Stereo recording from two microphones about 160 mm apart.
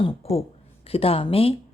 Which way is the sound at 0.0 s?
40° left (ahead or behind).